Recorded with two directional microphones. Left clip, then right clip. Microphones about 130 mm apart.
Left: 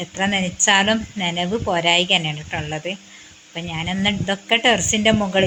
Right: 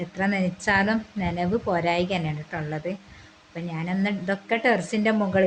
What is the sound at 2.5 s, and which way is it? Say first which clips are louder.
A woman's voice: left 2 dB; 30° left (ahead or behind).